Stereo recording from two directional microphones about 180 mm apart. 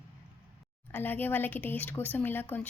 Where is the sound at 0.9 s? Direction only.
10° left (ahead or behind).